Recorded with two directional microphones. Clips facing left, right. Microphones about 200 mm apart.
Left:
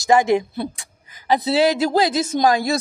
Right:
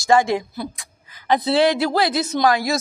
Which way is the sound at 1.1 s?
10° left (ahead or behind).